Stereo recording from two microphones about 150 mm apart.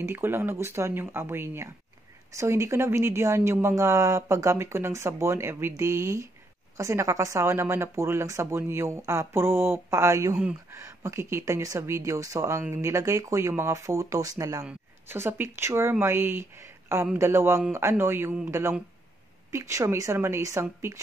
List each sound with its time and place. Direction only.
0.0 s a woman's voice: 15° right (ahead or behind)
14.6 s a woman's voice: 10° right (ahead or behind)